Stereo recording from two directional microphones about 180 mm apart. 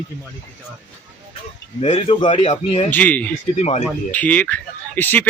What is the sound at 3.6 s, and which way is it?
Speech, 40° left (ahead or behind).